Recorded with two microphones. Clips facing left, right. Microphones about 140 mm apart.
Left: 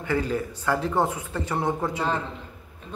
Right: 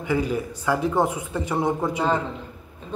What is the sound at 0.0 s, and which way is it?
A man's voice, 15° right (ahead or behind).